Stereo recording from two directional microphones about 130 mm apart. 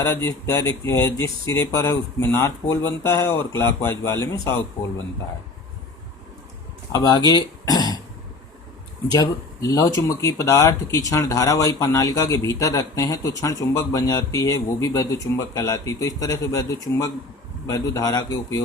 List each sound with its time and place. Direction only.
0.0 s speech: 20° left (ahead or behind)
6.9 s speech: 30° left (ahead or behind)
9.0 s speech: 30° left (ahead or behind)